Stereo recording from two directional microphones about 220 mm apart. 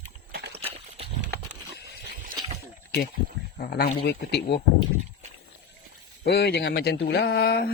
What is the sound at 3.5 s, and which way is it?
Speech, 45° left (ahead or behind).